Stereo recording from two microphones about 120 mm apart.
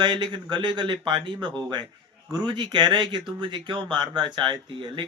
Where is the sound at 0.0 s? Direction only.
40° right (ahead or behind).